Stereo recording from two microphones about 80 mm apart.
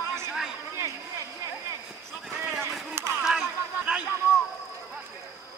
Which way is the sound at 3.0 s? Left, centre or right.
Right.